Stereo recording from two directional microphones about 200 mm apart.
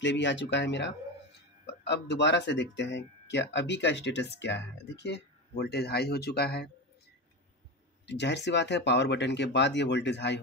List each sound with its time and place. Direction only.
0.0 s speech: 65° left (ahead or behind)
8.1 s speech: 60° left (ahead or behind)